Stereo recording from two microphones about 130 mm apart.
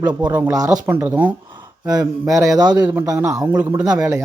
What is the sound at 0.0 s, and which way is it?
Speech, 35° right (ahead or behind).